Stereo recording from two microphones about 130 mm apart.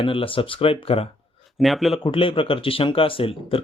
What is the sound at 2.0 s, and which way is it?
Speech, 45° left (ahead or behind).